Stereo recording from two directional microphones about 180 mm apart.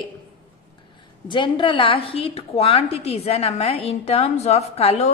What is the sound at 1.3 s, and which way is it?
A woman's voice, 25° left (ahead or behind).